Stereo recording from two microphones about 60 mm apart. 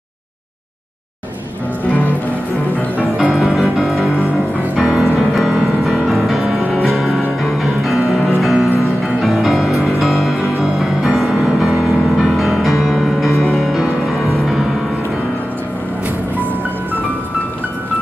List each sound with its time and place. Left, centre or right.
1.9 s music: left
3.7 s music: centre